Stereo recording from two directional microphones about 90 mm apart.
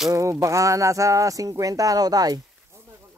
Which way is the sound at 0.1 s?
35° right (ahead or behind).